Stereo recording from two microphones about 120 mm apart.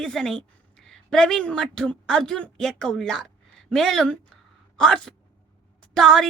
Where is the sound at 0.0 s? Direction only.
5° left (ahead or behind).